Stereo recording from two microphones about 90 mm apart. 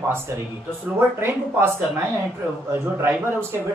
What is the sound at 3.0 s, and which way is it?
Speech, 25° right (ahead or behind).